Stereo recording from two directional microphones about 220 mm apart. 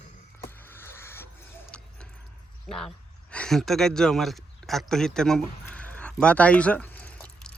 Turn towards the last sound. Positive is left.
turn(degrees=5)  # may be behind; listen again after turning